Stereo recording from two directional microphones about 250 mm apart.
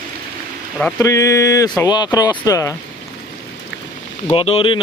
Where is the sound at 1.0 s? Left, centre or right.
Centre.